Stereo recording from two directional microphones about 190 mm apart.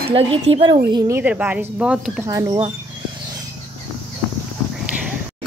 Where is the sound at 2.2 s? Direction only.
15° right (ahead or behind).